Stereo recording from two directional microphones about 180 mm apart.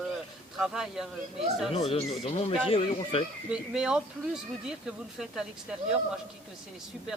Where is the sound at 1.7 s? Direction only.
35° left (ahead or behind).